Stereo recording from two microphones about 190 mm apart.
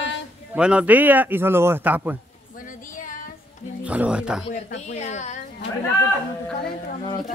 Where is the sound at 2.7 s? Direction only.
45° left (ahead or behind).